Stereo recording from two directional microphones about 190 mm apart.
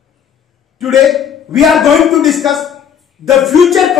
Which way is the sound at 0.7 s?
Centre (ahead or behind).